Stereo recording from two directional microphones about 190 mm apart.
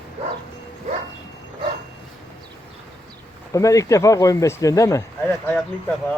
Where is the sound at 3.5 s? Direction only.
15° left (ahead or behind).